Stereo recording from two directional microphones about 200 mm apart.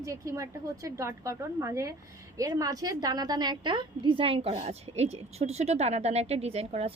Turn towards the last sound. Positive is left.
turn(degrees=-30)  # may be behind; listen again after turning